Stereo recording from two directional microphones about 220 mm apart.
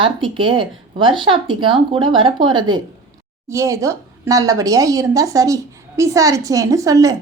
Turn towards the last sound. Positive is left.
turn(degrees=-15)  # may be behind; listen again after turning